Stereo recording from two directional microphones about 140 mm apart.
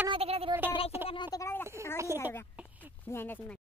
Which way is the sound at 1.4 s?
15° left (ahead or behind).